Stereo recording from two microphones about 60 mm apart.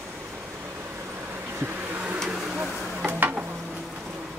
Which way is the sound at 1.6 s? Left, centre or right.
Right.